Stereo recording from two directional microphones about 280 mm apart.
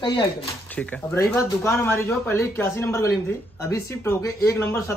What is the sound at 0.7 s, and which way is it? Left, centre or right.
Speech, centre.